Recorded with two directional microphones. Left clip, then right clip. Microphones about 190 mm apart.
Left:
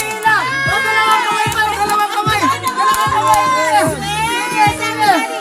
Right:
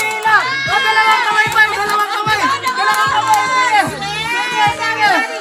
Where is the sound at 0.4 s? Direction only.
45° right (ahead or behind).